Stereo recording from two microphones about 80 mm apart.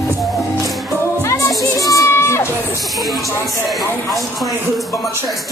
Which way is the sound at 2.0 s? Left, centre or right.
Left.